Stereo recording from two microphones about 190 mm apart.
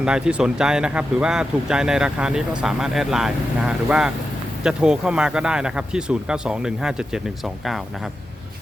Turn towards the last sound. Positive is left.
turn(degrees=0)  # may be behind; listen again after turning